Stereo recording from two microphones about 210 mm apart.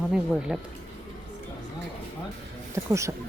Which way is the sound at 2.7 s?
15° right (ahead or behind).